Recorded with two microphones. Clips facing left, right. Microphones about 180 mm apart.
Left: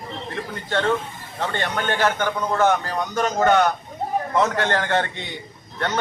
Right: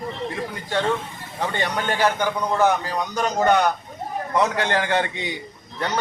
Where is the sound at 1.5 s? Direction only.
15° right (ahead or behind).